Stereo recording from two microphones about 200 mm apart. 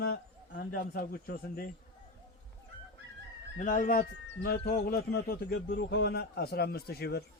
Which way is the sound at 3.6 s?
45° left (ahead or behind).